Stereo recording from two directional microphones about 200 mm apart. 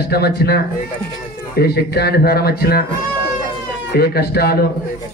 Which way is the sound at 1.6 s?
55° left (ahead or behind).